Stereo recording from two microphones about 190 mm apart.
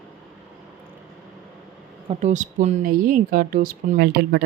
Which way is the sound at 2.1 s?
40° right (ahead or behind).